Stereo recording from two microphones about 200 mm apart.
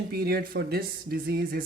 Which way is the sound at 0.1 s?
50° right (ahead or behind).